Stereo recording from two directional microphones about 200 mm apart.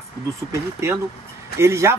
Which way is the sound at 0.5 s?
15° right (ahead or behind).